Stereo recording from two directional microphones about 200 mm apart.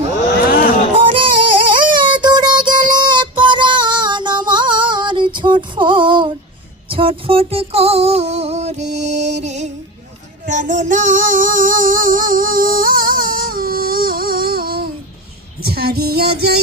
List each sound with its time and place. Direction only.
1.0 s music: 25° right (ahead or behind); by 16.6 s 50° right (ahead or behind)